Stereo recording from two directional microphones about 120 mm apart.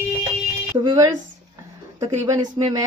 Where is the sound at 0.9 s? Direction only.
30° right (ahead or behind).